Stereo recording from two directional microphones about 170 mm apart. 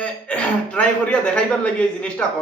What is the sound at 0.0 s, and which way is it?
A man's voice, 5° left (ahead or behind).